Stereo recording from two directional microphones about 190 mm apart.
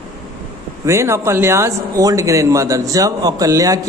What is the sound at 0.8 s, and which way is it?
A man's voice, 15° right (ahead or behind).